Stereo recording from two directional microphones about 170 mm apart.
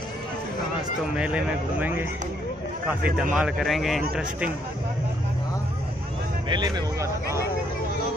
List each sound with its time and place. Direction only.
1.1 s speech: 5° right (ahead or behind)
3.2 s a man's voice: 5° right (ahead or behind)
6.5 s speech: 25° right (ahead or behind)